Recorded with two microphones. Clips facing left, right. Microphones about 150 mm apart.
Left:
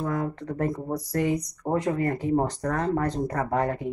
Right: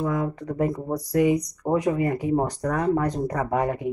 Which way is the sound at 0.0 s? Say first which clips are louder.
Right 3 dB; 10° right (ahead or behind).